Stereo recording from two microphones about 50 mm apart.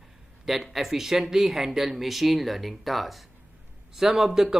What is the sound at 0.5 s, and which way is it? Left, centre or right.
A man's voice, centre.